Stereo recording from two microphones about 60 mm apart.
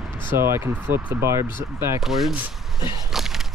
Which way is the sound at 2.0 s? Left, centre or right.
Centre.